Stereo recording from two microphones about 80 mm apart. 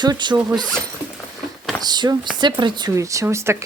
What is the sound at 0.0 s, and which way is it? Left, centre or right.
Speech, right.